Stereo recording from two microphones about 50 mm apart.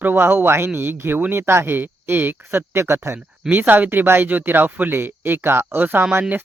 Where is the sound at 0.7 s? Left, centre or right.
Right.